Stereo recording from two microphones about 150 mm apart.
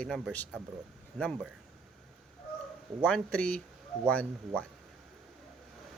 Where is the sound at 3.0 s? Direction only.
5° left (ahead or behind).